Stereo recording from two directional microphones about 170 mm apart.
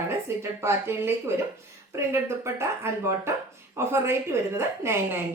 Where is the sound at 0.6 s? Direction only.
15° right (ahead or behind).